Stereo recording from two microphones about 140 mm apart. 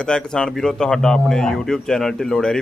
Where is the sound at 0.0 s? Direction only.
5° left (ahead or behind).